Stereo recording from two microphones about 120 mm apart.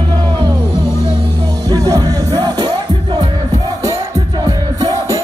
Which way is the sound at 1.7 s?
30° right (ahead or behind).